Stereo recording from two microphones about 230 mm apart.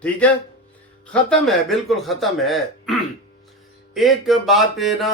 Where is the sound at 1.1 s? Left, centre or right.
Centre.